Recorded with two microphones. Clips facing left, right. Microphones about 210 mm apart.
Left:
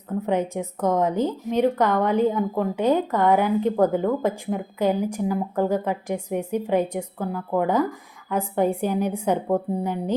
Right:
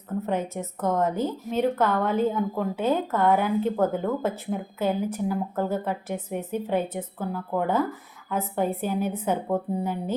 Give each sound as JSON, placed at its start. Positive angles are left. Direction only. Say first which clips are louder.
{"t": 0.3, "sound": "a woman's voice", "louder": "left 6 dB", "side_deg": 15}